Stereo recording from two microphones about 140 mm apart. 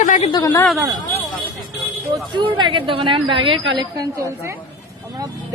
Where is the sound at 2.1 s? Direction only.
35° right (ahead or behind).